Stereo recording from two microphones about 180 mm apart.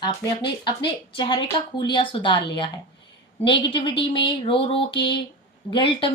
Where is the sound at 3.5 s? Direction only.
30° left (ahead or behind).